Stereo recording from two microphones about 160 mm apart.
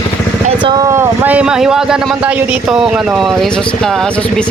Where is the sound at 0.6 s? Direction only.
25° right (ahead or behind).